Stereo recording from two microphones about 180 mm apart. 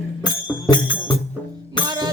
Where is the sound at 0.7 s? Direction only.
25° left (ahead or behind).